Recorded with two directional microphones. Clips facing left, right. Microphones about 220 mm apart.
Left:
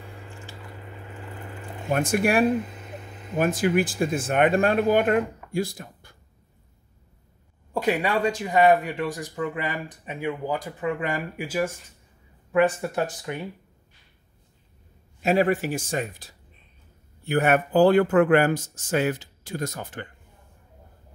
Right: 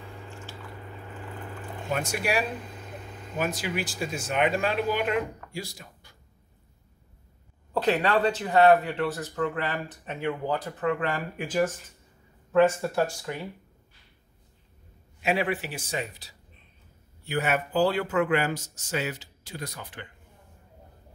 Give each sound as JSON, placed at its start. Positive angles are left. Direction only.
{"t": 1.9, "sound": "speech", "side_deg": 50}
{"t": 7.7, "sound": "speech", "side_deg": 10}
{"t": 15.2, "sound": "speech", "side_deg": 45}